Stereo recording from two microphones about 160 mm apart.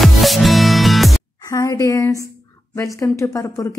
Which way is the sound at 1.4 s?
20° left (ahead or behind).